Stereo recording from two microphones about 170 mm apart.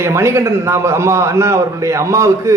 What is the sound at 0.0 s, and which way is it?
A man's voice, 15° right (ahead or behind).